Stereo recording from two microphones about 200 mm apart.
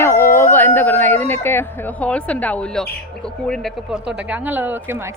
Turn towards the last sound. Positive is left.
turn(degrees=-10)  # may be behind; listen again after turning